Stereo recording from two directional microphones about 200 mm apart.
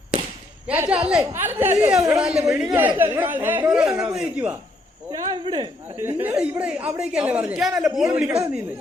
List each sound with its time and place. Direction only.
0.7 s a woman's voice: 10° right (ahead or behind)
5.3 s speech: 25° right (ahead or behind)
6.0 s a woman's voice: 10° right (ahead or behind)